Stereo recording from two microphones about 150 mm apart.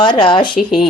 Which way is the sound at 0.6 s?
Centre (ahead or behind).